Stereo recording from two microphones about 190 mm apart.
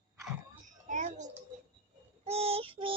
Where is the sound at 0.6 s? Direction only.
40° right (ahead or behind).